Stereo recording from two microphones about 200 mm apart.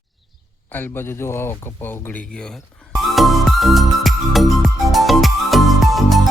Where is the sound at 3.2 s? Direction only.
Centre (ahead or behind).